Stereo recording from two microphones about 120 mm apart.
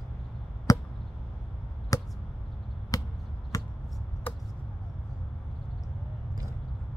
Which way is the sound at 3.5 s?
30° left (ahead or behind).